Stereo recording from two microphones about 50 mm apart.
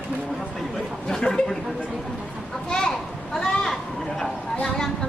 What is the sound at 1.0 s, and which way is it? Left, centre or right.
Speech, centre.